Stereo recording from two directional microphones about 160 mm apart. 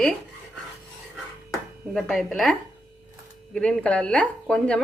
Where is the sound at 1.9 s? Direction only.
Centre (ahead or behind).